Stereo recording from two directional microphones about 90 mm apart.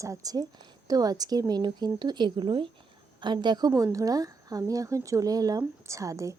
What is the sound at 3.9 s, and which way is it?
Speech, 40° right (ahead or behind).